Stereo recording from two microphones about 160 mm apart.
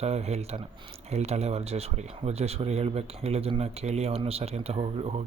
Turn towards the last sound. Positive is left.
turn(degrees=-40)  # may be behind; listen again after turning